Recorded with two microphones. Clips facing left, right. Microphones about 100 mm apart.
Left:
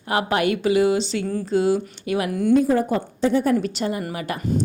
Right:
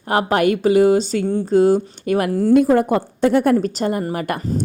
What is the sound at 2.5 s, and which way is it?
A woman's voice, 60° right (ahead or behind).